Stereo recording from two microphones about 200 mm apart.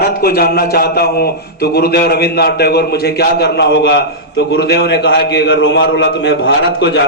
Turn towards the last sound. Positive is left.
turn(degrees=60)  # may be behind; listen again after turning